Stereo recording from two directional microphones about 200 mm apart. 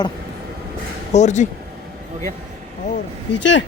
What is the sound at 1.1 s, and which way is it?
Speech, 35° left (ahead or behind).